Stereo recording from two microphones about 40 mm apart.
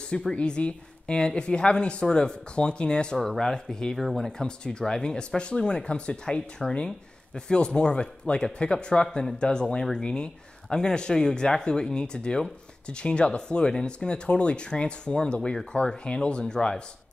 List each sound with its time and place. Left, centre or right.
0.3 s speech: left
3.9 s speech: centre
4.3 s speech: centre